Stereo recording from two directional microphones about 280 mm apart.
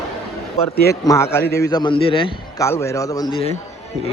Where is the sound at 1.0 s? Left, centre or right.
Centre.